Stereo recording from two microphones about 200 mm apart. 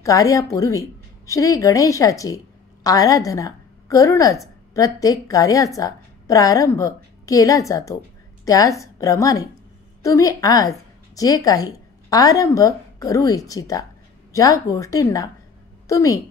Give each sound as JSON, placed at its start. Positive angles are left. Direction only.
{"t": 0.0, "sound": "a woman's voice", "side_deg": 15}